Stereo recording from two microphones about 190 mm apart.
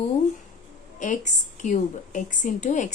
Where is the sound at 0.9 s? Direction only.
40° left (ahead or behind).